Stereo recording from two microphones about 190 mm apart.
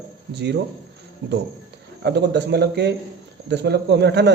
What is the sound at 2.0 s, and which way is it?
Speech, 60° right (ahead or behind).